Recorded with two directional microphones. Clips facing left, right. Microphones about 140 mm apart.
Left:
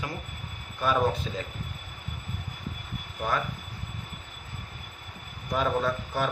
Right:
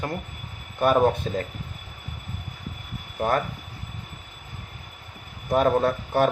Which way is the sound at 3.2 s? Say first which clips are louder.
Right 6 dB; 45° right (ahead or behind).